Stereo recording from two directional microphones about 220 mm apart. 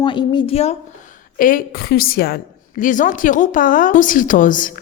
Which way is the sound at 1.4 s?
40° left (ahead or behind).